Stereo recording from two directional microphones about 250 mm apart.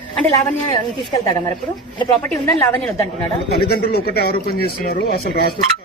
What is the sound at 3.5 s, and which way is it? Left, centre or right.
Speech, left.